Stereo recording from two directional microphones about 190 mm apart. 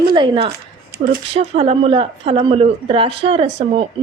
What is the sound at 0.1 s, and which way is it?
A woman's voice, 25° right (ahead or behind).